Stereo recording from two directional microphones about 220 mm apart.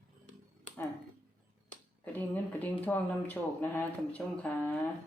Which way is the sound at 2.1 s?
10° left (ahead or behind).